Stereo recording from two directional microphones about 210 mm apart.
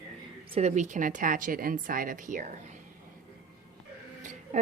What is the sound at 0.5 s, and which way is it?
Speech, 35° right (ahead or behind).